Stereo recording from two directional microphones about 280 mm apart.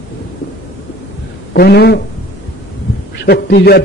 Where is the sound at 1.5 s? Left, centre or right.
Left.